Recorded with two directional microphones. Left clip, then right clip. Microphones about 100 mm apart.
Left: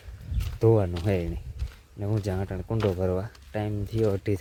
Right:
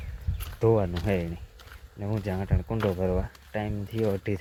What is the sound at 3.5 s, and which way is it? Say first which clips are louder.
Speech: left 2 dB; 45° left (ahead or behind).